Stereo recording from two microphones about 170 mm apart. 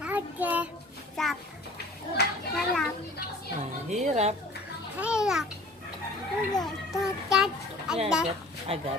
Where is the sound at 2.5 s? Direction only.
Centre (ahead or behind).